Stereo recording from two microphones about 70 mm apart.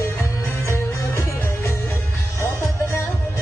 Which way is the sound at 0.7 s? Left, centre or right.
Left.